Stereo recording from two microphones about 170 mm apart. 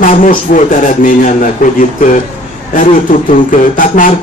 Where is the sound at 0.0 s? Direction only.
50° left (ahead or behind).